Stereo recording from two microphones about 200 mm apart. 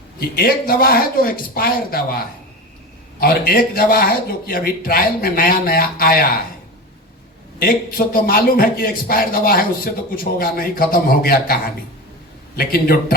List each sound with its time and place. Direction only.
0.2 s a man's voice: 50° left (ahead or behind)
3.2 s a man's voice: 50° left (ahead or behind)
7.6 s a man's voice: 45° left (ahead or behind)
12.5 s a man's voice: 50° left (ahead or behind)